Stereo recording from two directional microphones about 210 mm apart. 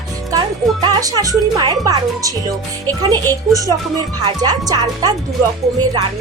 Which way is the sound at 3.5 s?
15° right (ahead or behind).